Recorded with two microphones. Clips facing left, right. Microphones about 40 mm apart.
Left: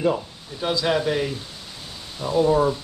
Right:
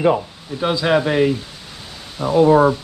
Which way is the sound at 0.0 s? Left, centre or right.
Right.